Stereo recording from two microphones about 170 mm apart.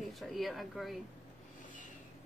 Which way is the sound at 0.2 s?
Centre (ahead or behind).